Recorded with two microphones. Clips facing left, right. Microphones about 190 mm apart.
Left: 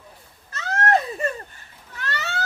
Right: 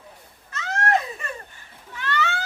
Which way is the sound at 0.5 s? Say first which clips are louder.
Left 2 dB; 35° left (ahead or behind).